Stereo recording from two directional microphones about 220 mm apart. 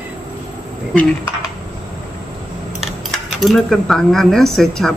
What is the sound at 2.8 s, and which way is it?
Speech, centre (ahead or behind).